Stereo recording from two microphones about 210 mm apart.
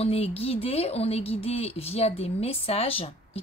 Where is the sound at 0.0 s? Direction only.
30° left (ahead or behind).